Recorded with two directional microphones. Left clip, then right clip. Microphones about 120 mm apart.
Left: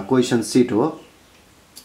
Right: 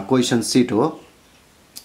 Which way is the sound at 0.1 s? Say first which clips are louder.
Even; 15° right (ahead or behind).